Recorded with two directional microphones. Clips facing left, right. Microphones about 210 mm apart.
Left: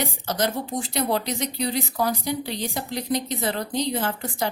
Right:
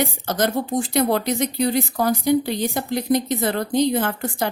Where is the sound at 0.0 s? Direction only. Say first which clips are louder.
Right 4 dB; 50° right (ahead or behind).